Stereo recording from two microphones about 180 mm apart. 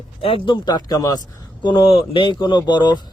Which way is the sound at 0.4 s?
25° left (ahead or behind).